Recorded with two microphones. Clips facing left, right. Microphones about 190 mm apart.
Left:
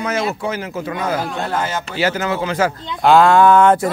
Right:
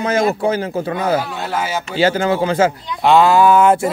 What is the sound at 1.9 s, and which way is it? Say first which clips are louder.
Speech: right 5 dB; 30° right (ahead or behind).